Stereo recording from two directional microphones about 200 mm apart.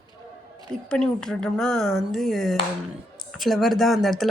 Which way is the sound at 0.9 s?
5° left (ahead or behind).